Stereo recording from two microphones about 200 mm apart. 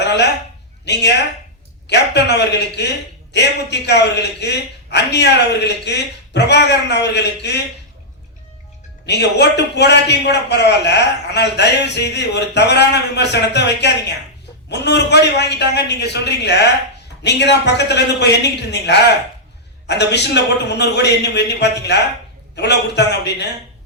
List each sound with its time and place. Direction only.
0.0 s a sound: 60° left (ahead or behind)
0.9 s a man's voice: 55° left (ahead or behind)
9.0 s a man's voice: 60° left (ahead or behind)